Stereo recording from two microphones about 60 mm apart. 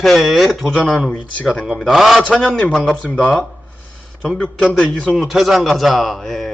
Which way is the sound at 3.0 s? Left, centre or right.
Left.